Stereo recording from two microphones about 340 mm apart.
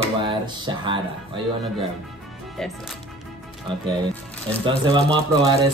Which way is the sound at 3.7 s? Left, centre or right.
Centre.